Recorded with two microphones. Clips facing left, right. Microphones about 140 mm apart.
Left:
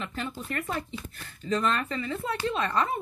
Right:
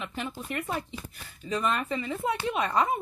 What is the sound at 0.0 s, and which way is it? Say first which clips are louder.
Speech: left 1 dB; 15° right (ahead or behind).